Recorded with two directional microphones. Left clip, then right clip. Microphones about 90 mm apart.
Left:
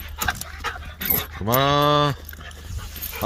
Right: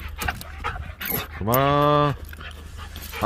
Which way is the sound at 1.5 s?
5° left (ahead or behind).